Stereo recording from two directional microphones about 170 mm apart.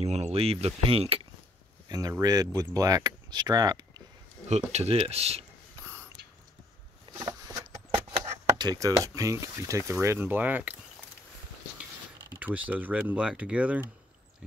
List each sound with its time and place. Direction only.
0.0 s speech: 40° right (ahead or behind)
1.9 s speech: 20° right (ahead or behind)
4.5 s speech: 40° right (ahead or behind)
7.2 s a sound: 20° right (ahead or behind)
8.2 s speech: 20° right (ahead or behind)
12.4 s speech: 10° right (ahead or behind)